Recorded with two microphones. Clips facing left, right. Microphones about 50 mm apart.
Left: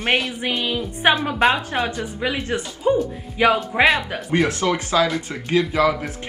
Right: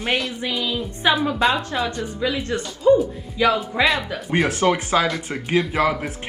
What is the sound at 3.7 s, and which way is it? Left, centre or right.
Speech, centre.